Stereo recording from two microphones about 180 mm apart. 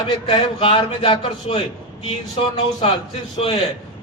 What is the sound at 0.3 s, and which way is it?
A man's voice, 30° left (ahead or behind).